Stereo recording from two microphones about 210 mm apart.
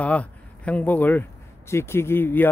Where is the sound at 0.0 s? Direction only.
5° left (ahead or behind).